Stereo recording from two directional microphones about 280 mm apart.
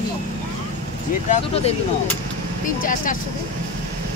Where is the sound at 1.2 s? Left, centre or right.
Left.